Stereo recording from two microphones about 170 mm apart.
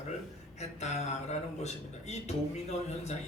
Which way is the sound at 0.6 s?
40° left (ahead or behind).